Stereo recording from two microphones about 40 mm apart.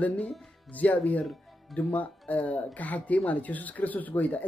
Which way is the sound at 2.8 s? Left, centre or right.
Left.